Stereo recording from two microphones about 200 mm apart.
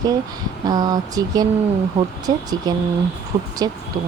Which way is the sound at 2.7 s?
20° right (ahead or behind).